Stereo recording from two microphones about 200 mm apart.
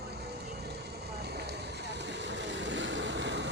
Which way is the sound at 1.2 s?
55° right (ahead or behind).